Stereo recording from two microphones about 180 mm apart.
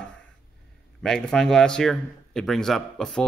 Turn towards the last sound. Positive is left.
turn(degrees=5)  # may be behind; listen again after turning